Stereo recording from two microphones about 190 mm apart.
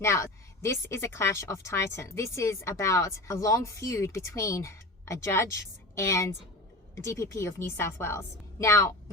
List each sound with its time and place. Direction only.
0.0 s a woman's voice: 15° left (ahead or behind)